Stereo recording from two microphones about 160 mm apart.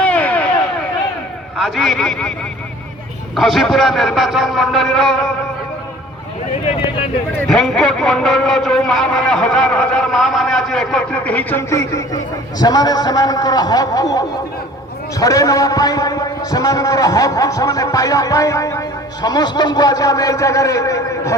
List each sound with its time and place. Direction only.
0.0 s a sound: 10° left (ahead or behind)
1.5 s a man's voice: centre (ahead or behind)
3.3 s a man's voice: centre (ahead or behind)
7.4 s a man's voice: centre (ahead or behind); by 21.3 s 20° left (ahead or behind)